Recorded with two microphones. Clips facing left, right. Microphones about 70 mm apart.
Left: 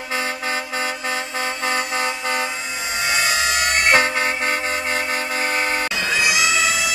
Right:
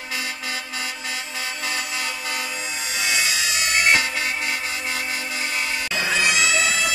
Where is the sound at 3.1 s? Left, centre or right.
Left.